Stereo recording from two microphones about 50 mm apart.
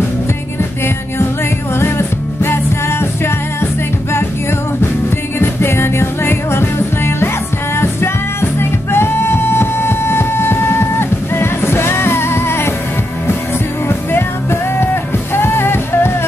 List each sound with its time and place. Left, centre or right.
1.8 s music: left
5.4 s music: left
13.8 s music: left